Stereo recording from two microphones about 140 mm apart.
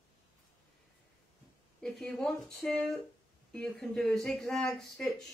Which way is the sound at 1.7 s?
5° left (ahead or behind).